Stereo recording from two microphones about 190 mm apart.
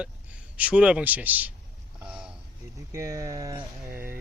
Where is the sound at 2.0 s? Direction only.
5° right (ahead or behind).